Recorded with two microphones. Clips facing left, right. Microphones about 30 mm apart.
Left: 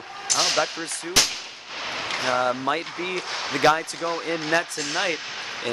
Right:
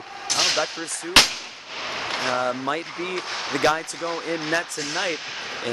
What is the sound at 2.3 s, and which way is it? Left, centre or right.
Speech, centre.